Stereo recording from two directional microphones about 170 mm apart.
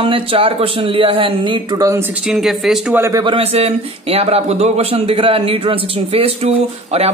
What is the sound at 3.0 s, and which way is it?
Speech, 20° right (ahead or behind).